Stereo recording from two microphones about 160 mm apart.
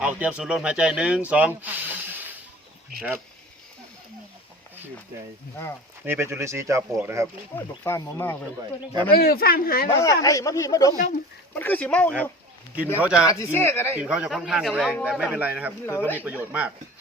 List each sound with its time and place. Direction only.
0.0 s speech: 10° right (ahead or behind)
6.1 s speech: 15° right (ahead or behind)
7.9 s speech: 15° left (ahead or behind)
9.1 s speech: 70° left (ahead or behind)
9.9 s speech: 20° left (ahead or behind)
11.5 s speech: 10° left (ahead or behind)
13.0 s a man's voice: 5° right (ahead or behind)
13.2 s speech: 15° left (ahead or behind)
13.9 s a man's voice: 5° right (ahead or behind)
15.9 s speech: 15° left (ahead or behind)
16.1 s speech: 10° right (ahead or behind)